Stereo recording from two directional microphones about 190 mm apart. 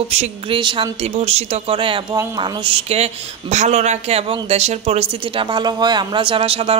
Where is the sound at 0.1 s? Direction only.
30° right (ahead or behind).